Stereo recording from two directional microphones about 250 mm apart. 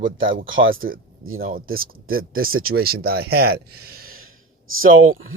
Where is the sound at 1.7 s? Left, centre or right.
Right.